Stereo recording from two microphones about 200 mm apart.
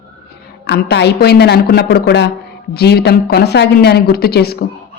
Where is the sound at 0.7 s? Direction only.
55° left (ahead or behind).